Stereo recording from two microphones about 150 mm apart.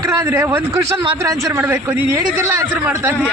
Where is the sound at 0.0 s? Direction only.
15° right (ahead or behind).